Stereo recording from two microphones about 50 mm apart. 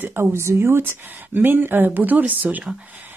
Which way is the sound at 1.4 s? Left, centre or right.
Right.